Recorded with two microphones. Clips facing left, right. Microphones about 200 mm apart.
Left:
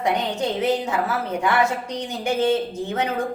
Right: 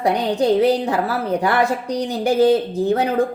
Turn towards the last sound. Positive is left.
turn(degrees=-35)  # may be behind; listen again after turning